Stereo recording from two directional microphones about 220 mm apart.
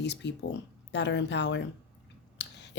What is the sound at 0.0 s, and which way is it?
A woman's voice, 50° left (ahead or behind).